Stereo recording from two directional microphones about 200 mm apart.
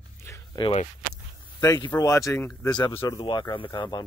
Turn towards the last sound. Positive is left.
turn(degrees=25)  # may be behind; listen again after turning